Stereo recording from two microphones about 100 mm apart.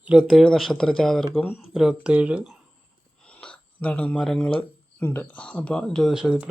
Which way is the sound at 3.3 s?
10° left (ahead or behind).